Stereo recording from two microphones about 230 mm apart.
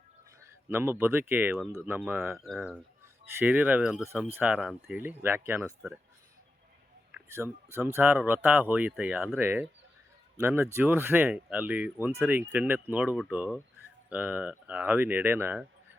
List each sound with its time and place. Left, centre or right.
0.7 s speech: centre
7.1 s speech: centre